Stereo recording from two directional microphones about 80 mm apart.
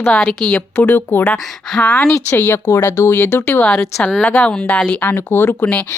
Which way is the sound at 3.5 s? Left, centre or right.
Centre.